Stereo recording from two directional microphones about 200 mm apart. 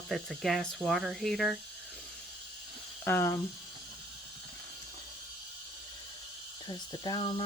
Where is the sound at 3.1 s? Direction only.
10° left (ahead or behind).